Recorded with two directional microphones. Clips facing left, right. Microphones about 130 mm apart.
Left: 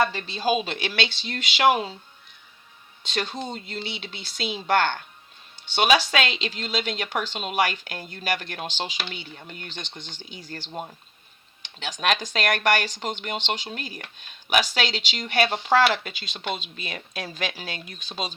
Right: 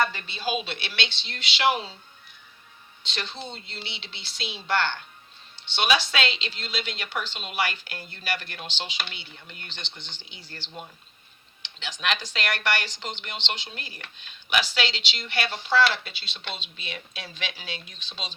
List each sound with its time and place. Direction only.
0.1 s speech: 35° left (ahead or behind)
3.0 s speech: 45° left (ahead or behind)